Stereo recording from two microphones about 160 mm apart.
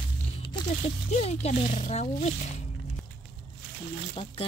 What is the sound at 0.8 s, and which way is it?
Speech, 40° left (ahead or behind).